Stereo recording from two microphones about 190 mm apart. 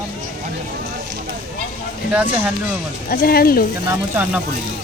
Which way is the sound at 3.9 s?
10° right (ahead or behind).